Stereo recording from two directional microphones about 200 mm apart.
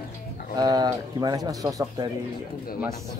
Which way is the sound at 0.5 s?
20° right (ahead or behind).